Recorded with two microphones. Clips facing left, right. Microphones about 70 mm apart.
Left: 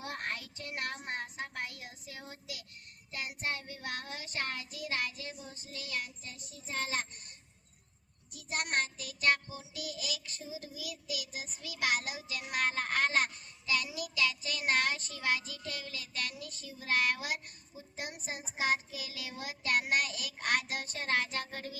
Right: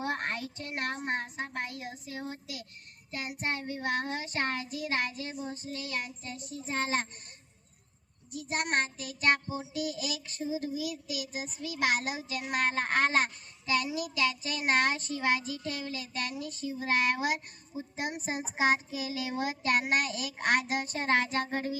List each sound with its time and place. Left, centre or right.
0.0 s child singing: right
8.3 s a child's voice: right